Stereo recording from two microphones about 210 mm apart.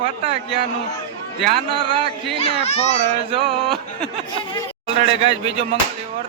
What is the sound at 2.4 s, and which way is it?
Speech, 30° left (ahead or behind).